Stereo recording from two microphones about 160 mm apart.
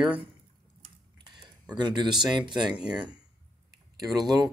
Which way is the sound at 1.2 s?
25° right (ahead or behind).